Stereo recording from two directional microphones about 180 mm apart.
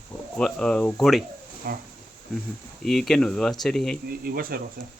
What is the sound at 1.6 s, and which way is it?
Speech, 60° right (ahead or behind).